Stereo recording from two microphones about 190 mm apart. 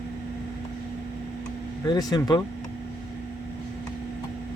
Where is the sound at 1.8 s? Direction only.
20° left (ahead or behind).